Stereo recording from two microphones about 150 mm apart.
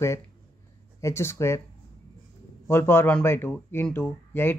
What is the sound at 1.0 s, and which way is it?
Speech, 15° left (ahead or behind).